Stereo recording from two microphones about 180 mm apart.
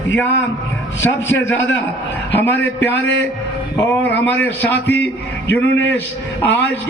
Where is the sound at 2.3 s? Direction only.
10° left (ahead or behind).